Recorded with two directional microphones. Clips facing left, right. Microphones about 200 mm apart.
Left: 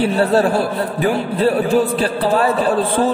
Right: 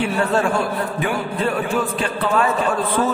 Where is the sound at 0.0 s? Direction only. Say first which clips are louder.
Left 5 dB; 35° left (ahead or behind).